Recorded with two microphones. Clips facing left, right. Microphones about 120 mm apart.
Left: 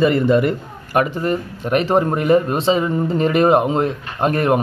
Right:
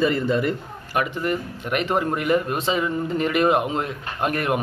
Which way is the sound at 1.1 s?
35° left (ahead or behind).